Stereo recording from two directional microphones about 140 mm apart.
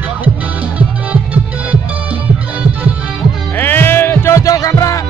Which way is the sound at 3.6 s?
15° left (ahead or behind).